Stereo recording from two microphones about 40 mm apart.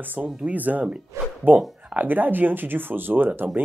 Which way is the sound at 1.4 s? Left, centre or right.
Right.